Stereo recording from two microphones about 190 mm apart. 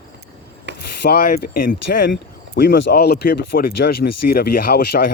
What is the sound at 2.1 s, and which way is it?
Speech, 65° left (ahead or behind).